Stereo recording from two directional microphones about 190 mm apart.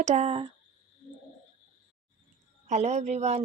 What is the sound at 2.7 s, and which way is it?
Speech, 40° right (ahead or behind).